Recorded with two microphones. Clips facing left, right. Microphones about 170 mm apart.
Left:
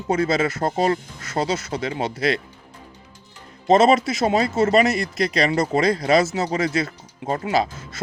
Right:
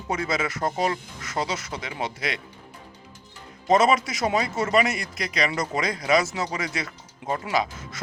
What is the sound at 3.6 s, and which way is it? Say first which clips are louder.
Speech: left 5 dB; 30° left (ahead or behind).